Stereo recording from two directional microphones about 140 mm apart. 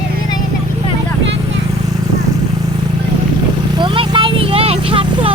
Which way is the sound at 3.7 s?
35° right (ahead or behind).